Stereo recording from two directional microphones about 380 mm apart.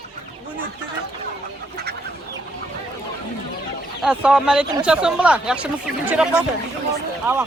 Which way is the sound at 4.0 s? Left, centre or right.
Centre.